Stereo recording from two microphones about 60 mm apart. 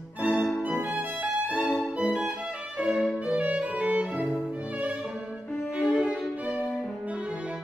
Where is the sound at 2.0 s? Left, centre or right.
Centre.